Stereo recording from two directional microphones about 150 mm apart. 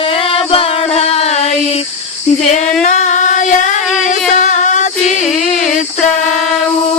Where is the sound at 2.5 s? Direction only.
55° left (ahead or behind).